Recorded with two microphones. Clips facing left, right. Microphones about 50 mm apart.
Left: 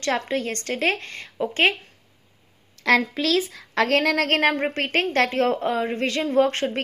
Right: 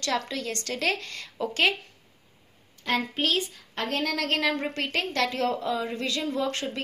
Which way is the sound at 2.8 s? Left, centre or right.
Left.